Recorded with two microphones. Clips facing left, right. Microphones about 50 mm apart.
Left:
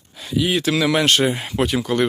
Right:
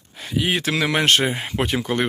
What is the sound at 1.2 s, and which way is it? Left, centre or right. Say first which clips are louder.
Speech: left 3 dB; right.